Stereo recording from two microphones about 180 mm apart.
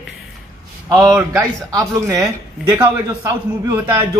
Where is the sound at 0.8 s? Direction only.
20° right (ahead or behind).